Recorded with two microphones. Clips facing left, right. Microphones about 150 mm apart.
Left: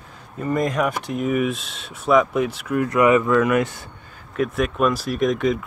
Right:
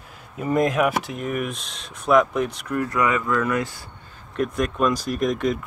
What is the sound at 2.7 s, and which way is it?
Speech, 20° left (ahead or behind).